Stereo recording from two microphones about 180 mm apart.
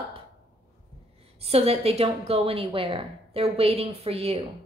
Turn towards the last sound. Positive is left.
turn(degrees=-35)  # may be behind; listen again after turning